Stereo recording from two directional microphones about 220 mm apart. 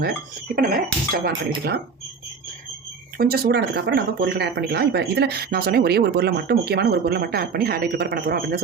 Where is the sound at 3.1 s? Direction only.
45° right (ahead or behind).